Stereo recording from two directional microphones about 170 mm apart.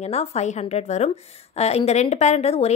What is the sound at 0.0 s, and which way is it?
A woman's voice, 40° left (ahead or behind).